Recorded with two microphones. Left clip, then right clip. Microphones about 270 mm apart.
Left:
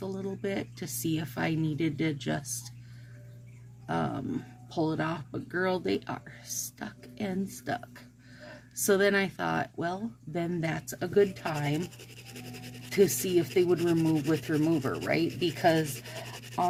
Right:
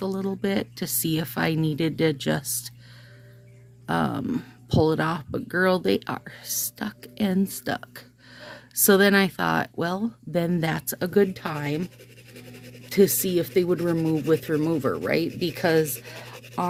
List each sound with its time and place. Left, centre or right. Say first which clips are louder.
0.0 s speech: right 7 dB; right
3.8 s speech: right 6 dB; right
12.9 s speech: right 4 dB; right